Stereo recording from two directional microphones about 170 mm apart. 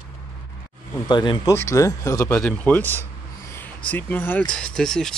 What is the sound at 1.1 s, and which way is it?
Speech, 25° left (ahead or behind).